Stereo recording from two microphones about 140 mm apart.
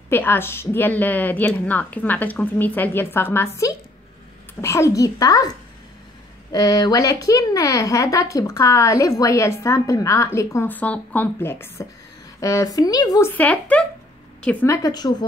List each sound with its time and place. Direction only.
0.1 s a woman's voice: 15° left (ahead or behind)
6.5 s speech: 30° left (ahead or behind)
13.3 s a woman's voice: 10° left (ahead or behind)
14.7 s speech: 25° left (ahead or behind)